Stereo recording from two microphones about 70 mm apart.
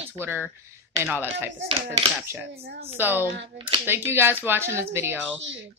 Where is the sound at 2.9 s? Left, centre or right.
Right.